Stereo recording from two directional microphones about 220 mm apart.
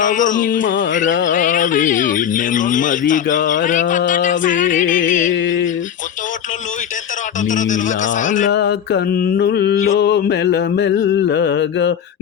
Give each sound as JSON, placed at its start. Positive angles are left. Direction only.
{"t": 0.0, "sound": "speech", "side_deg": 35}
{"t": 0.6, "sound": "music", "side_deg": 55}
{"t": 1.3, "sound": "speech", "side_deg": 35}
{"t": 5.3, "sound": "music", "side_deg": 55}
{"t": 7.4, "sound": "speech", "side_deg": 35}
{"t": 8.5, "sound": "mantra", "side_deg": 50}